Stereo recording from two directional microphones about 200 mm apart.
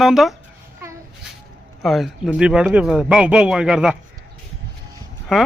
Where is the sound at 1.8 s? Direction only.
Centre (ahead or behind).